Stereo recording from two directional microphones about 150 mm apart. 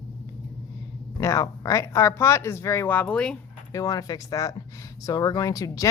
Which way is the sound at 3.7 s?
20° left (ahead or behind).